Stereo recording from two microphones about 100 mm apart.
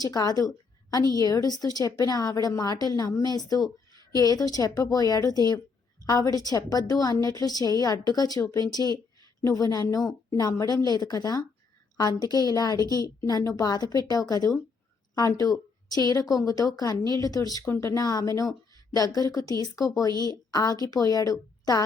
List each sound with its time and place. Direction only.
0.0 s a woman's voice: 40° left (ahead or behind)